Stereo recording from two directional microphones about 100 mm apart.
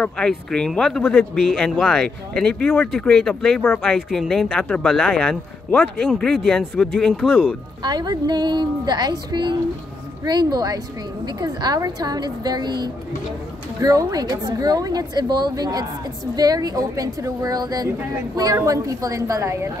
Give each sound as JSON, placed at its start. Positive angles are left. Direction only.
{"t": 0.0, "sound": "speech", "side_deg": 5}
{"t": 7.8, "sound": "a woman's voice", "side_deg": -45}